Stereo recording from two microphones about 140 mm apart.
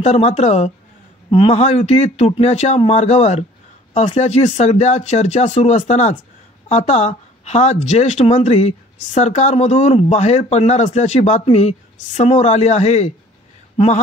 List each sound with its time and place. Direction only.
0.0 s speech: 50° left (ahead or behind)